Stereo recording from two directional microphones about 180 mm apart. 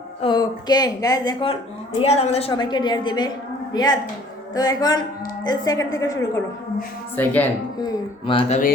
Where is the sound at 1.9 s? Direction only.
35° left (ahead or behind); by 6.1 s 20° left (ahead or behind).